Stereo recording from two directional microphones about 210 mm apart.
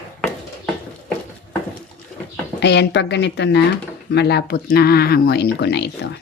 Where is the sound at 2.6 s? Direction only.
55° left (ahead or behind).